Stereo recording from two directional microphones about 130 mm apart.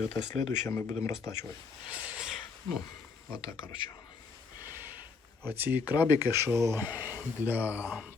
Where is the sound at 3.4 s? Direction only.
35° left (ahead or behind).